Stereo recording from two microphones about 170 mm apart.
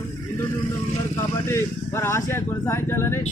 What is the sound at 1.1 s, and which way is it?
A man's voice, 15° left (ahead or behind).